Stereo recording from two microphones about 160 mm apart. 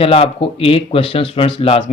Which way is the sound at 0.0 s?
35° left (ahead or behind).